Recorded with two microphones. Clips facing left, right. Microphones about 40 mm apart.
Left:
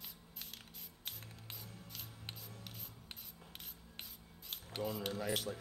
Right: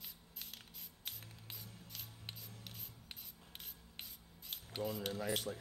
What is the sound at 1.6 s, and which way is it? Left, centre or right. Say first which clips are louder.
Rub: left 2 dB; centre.